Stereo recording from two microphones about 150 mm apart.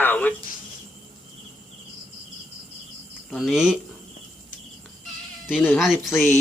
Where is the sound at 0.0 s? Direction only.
10° left (ahead or behind).